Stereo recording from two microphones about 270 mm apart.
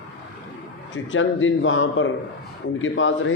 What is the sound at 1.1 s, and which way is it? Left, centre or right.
A man's voice, left.